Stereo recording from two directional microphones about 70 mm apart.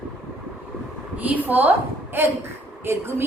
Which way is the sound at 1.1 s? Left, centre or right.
Right.